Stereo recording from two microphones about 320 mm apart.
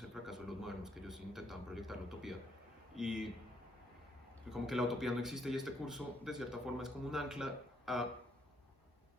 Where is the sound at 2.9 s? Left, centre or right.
Centre.